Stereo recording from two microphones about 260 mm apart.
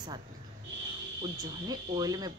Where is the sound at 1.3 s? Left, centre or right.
Centre.